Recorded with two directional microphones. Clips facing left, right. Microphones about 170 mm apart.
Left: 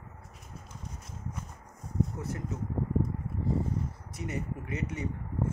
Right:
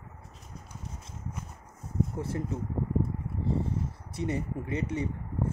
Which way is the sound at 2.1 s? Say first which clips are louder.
Right 4 dB; 30° right (ahead or behind).